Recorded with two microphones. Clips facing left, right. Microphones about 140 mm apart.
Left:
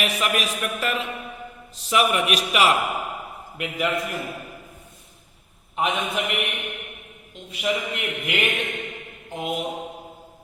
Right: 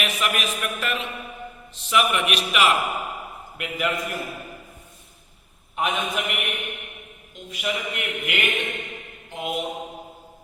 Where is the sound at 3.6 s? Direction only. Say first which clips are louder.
Left 2 dB; 25° left (ahead or behind).